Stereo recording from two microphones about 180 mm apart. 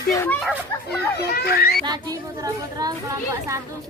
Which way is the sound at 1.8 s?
20° right (ahead or behind).